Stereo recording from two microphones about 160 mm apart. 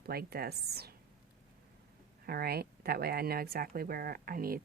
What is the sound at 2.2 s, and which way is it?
Speech, 75° right (ahead or behind).